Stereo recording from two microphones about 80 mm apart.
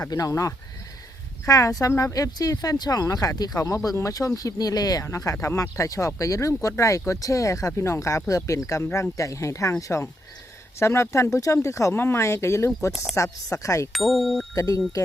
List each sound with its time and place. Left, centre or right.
0.1 s speech: left
1.9 s speech: left
2.1 s speech: left
5.0 s speech: left
10.8 s speech: left
13.9 s speech: centre
14.5 s speech: left